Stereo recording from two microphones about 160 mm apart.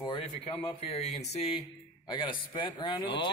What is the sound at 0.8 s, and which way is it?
A man's voice, 40° left (ahead or behind).